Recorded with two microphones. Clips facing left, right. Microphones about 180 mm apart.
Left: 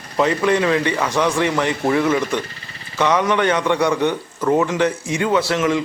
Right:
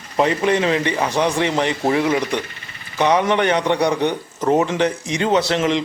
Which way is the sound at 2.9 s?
15° right (ahead or behind).